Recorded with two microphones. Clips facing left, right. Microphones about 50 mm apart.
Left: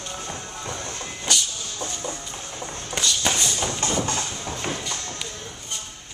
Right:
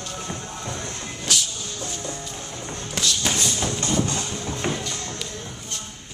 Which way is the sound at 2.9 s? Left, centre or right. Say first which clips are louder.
Left 1 dB; centre.